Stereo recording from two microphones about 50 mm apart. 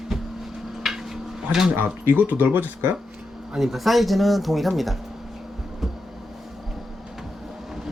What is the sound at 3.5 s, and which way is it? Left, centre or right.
Speech, centre.